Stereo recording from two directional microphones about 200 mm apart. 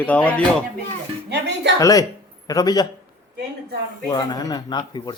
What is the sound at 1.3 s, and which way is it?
Speech, 60° right (ahead or behind).